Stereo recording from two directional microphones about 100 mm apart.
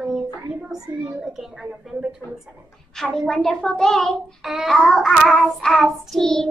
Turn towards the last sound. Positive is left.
turn(degrees=5)  # may be behind; listen again after turning